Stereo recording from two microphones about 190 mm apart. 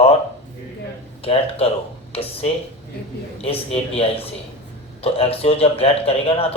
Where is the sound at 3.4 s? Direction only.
30° left (ahead or behind).